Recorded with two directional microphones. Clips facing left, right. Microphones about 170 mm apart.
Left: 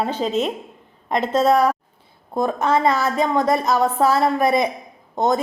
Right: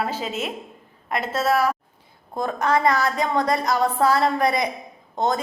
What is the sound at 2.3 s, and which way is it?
A woman's voice, 20° left (ahead or behind).